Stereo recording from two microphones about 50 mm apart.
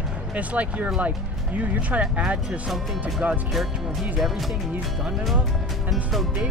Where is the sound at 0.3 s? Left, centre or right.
Right.